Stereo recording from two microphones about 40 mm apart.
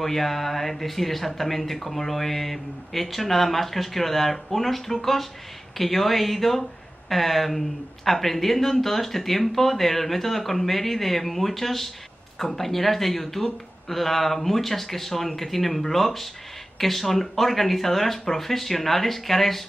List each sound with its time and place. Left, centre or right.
0.0 s speech: centre